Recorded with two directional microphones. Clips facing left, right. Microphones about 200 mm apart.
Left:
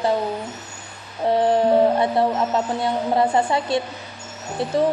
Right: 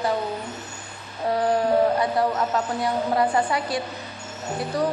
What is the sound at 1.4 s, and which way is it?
A woman's voice, 25° left (ahead or behind).